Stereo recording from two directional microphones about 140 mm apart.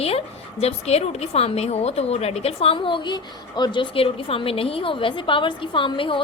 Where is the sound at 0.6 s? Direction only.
50° left (ahead or behind).